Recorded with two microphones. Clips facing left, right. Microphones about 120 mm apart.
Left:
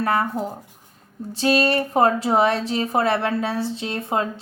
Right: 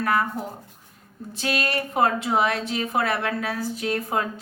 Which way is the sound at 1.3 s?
30° left (ahead or behind).